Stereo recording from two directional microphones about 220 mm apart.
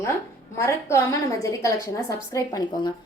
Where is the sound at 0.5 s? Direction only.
10° left (ahead or behind).